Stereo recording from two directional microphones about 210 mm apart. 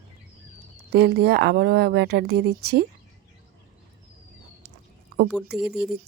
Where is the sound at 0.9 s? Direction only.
50° right (ahead or behind).